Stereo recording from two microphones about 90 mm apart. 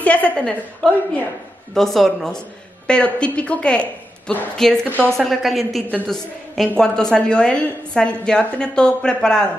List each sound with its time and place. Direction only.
0.0 s a woman's voice: 15° left (ahead or behind)
4.6 s a woman's voice: 5° left (ahead or behind)